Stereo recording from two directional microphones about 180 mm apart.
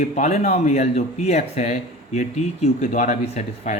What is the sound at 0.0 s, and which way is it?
Speech, 40° left (ahead or behind).